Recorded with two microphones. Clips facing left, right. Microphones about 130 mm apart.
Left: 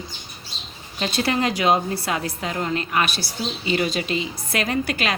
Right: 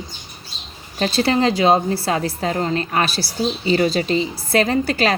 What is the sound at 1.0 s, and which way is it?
A woman's voice, 30° right (ahead or behind).